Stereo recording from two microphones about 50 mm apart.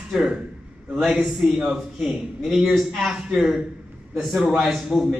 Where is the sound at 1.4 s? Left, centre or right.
Right.